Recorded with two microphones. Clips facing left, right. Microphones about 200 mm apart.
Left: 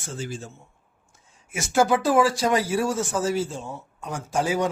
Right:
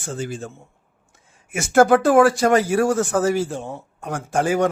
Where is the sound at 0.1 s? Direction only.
55° right (ahead or behind).